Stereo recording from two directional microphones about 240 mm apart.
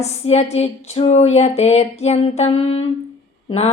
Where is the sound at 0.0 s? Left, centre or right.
Left.